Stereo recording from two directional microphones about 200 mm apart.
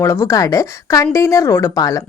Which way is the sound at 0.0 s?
15° left (ahead or behind).